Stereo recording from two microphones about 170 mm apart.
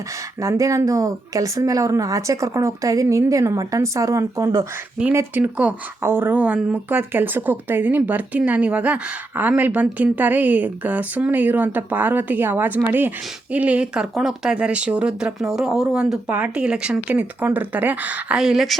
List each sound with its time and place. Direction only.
0.4 s speech: 20° right (ahead or behind); by 18.8 s centre (ahead or behind)